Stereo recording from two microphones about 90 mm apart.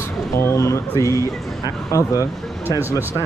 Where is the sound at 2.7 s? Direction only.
20° right (ahead or behind).